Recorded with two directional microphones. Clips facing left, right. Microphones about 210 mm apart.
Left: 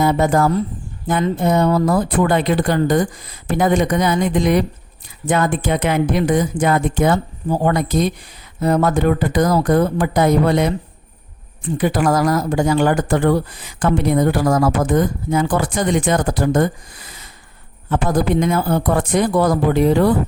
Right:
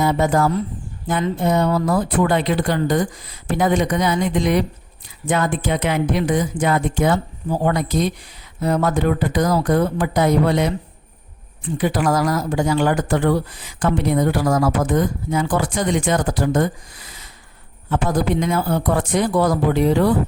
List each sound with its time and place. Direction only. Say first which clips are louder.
0.0 s speech: left 2 dB; 50° left (ahead or behind)
11.8 s speech: left 2 dB; 50° left (ahead or behind)